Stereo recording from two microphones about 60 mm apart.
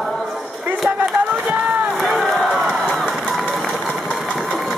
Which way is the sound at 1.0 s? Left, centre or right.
Right.